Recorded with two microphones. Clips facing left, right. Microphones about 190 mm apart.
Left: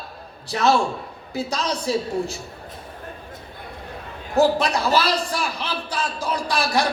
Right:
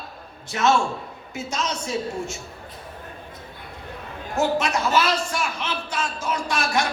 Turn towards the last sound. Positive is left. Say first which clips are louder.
# left 2 dB
turn(degrees=35)  # may be behind; listen again after turning